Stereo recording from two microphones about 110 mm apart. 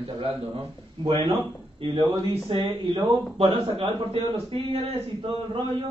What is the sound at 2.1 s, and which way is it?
A man's voice, 65° right (ahead or behind).